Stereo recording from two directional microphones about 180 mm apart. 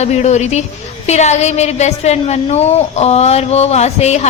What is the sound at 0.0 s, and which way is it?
A woman's voice, 40° left (ahead or behind).